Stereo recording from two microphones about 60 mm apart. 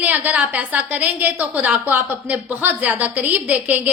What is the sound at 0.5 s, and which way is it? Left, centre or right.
A woman's voice, right.